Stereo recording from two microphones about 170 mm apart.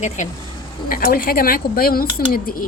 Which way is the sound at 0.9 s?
60° left (ahead or behind).